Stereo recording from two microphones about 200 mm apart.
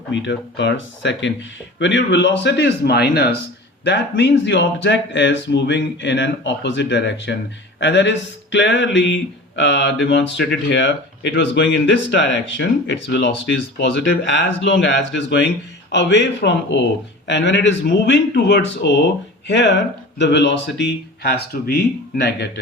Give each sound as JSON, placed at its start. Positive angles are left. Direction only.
{"t": 0.1, "sound": "speech", "side_deg": 65}